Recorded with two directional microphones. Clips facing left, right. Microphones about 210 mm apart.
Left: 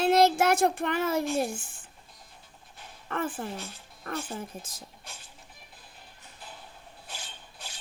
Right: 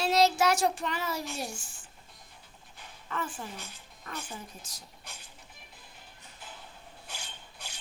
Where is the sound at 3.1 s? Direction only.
55° left (ahead or behind).